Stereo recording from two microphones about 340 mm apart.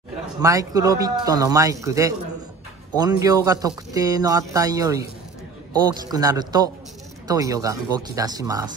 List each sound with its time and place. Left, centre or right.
0.4 s speech: centre
6.0 s speech: centre